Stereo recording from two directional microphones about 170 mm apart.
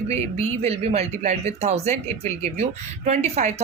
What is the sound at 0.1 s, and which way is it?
Speech, 40° right (ahead or behind).